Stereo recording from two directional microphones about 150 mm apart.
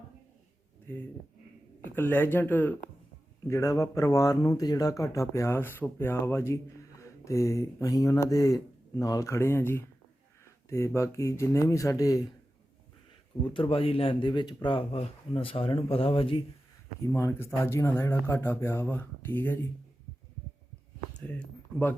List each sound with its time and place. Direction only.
2.0 s speech: 15° left (ahead or behind)
13.4 s speech: 35° left (ahead or behind)
17.0 s speech: 20° left (ahead or behind)
21.2 s speech: 10° left (ahead or behind)